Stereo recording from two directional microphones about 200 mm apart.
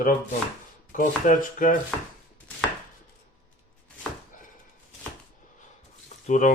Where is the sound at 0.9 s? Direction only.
45° left (ahead or behind).